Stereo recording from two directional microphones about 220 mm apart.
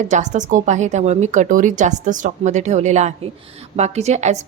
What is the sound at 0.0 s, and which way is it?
A woman's voice, 35° right (ahead or behind).